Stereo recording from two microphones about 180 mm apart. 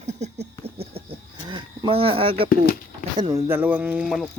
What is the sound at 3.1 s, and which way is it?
Speech, 25° right (ahead or behind).